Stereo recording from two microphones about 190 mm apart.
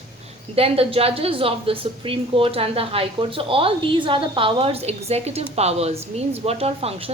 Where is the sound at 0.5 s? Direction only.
30° right (ahead or behind).